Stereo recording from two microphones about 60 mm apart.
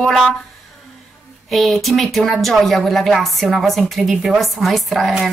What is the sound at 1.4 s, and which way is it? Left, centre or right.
A woman's voice, centre.